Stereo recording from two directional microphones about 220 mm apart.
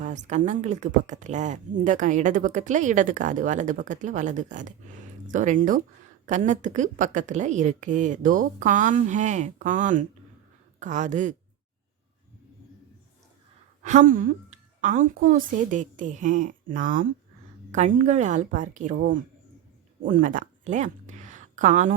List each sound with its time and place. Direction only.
0.0 s speech: 35° right (ahead or behind)
13.8 s speech: 35° right (ahead or behind)